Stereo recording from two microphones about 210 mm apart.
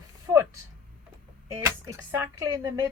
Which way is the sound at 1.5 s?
15° right (ahead or behind).